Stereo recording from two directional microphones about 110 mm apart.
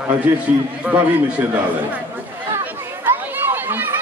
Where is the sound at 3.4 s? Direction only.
20° right (ahead or behind).